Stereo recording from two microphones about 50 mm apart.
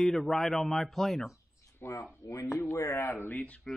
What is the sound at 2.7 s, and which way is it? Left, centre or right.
Speech, left.